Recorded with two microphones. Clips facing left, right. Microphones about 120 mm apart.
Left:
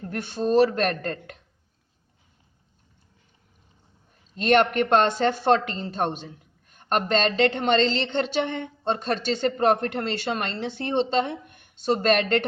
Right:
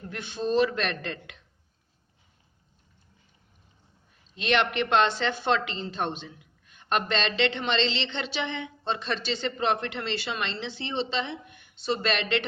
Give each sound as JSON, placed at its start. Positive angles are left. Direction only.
{"t": 0.0, "sound": "speech", "side_deg": 45}
{"t": 4.4, "sound": "speech", "side_deg": 45}